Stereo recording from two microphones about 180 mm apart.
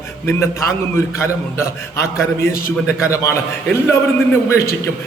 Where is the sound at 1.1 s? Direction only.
15° left (ahead or behind).